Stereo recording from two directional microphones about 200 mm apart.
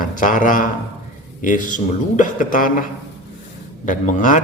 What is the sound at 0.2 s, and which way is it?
A man's voice, 40° left (ahead or behind).